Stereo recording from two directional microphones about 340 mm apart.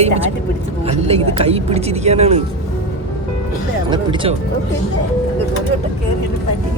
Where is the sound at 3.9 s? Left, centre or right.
Centre.